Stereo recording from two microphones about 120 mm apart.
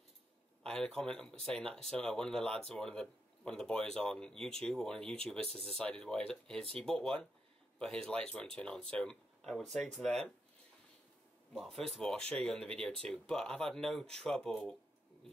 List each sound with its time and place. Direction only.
0.7 s speech: 5° left (ahead or behind)
5.5 s speech: 55° right (ahead or behind)
5.8 s speech: 10° left (ahead or behind)
11.5 s speech: centre (ahead or behind)